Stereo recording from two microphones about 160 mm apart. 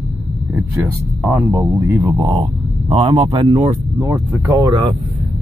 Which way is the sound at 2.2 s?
35° right (ahead or behind).